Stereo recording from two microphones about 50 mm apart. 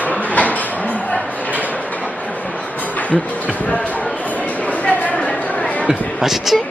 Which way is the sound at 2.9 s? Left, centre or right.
Left.